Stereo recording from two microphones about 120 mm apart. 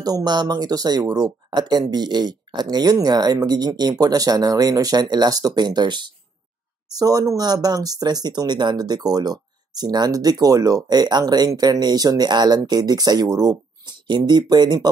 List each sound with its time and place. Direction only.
0.0 s speech: 35° right (ahead or behind)